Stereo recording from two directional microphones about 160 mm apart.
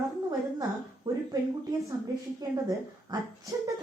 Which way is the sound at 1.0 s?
25° right (ahead or behind).